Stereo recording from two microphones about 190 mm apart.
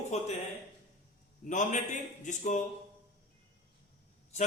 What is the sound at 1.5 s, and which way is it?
A man's voice, 40° left (ahead or behind).